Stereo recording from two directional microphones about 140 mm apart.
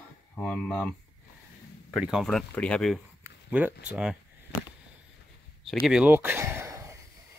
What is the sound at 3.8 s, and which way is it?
Speech, 5° right (ahead or behind).